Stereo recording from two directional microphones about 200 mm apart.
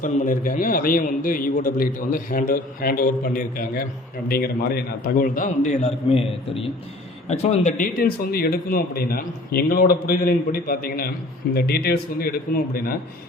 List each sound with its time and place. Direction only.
0.0 s a man's voice: 40° left (ahead or behind)